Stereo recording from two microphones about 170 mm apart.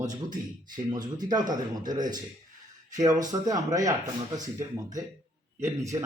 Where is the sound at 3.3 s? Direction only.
20° right (ahead or behind).